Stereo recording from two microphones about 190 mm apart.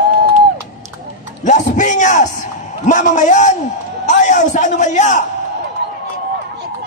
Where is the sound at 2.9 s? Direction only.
40° left (ahead or behind).